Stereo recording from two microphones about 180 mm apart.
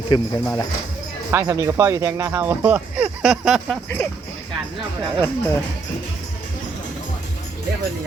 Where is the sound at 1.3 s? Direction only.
15° right (ahead or behind).